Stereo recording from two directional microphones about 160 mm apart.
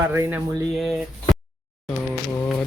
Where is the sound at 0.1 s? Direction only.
10° right (ahead or behind).